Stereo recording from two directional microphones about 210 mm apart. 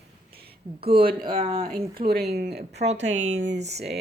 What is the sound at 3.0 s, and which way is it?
Speech, 35° right (ahead or behind).